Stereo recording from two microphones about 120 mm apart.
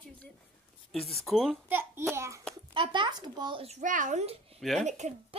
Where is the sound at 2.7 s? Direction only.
40° right (ahead or behind).